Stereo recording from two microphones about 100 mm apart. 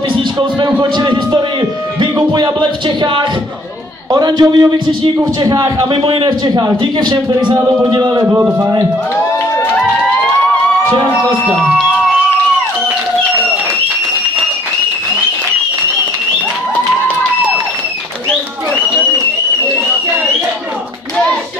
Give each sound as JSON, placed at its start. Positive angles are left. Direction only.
{"t": 0.4, "sound": "a man's voice", "side_deg": -50}
{"t": 5.9, "sound": "a man's voice", "side_deg": -60}
{"t": 8.2, "sound": "a man's voice", "side_deg": -30}